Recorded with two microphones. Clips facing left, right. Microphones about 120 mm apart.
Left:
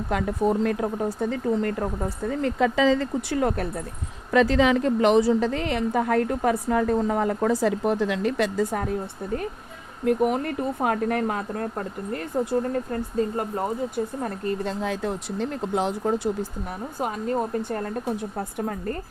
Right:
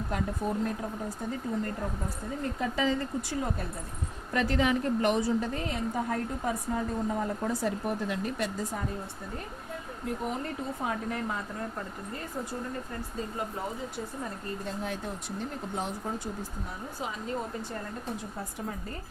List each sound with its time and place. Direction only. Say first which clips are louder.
0.1 s a woman's voice: left 9 dB; 90° left
4.3 s a woman's voice: left 8 dB; 90° left
17.0 s speech: left 9 dB; 55° left (ahead or behind)